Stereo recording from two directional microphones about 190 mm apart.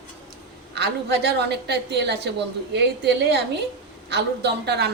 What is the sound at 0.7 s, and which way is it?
A woman's voice, 60° right (ahead or behind).